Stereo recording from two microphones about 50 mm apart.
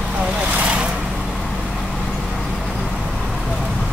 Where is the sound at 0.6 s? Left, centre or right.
Right.